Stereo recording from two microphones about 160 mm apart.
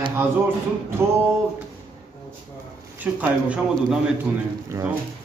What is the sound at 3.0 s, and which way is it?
Speech, 10° right (ahead or behind).